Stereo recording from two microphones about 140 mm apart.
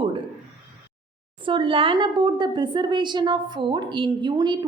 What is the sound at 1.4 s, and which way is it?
A woman's voice, 35° right (ahead or behind).